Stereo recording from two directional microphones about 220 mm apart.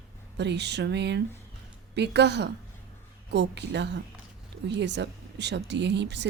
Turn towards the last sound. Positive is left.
turn(degrees=-50)  # may be behind; listen again after turning